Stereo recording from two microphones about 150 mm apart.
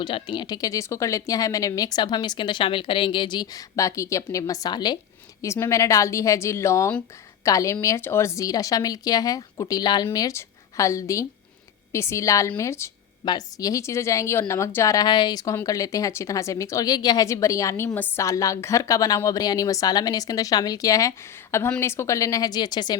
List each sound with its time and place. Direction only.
0.0 s a woman's voice: 30° left (ahead or behind)